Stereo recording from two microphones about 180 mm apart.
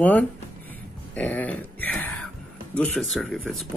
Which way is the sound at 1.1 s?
10° left (ahead or behind).